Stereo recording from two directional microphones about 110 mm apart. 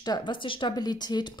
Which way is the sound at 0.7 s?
40° left (ahead or behind).